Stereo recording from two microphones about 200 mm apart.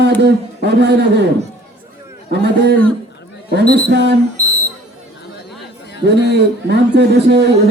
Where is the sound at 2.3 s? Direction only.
55° right (ahead or behind).